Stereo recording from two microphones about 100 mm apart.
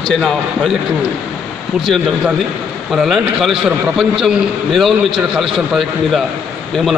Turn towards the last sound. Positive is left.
turn(degrees=0)  # may be behind; listen again after turning